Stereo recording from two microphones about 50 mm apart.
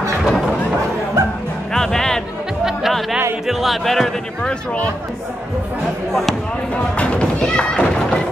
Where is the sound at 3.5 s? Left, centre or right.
Centre.